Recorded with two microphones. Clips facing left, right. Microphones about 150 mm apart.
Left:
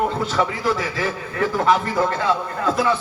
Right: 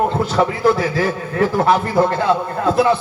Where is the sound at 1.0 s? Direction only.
40° right (ahead or behind).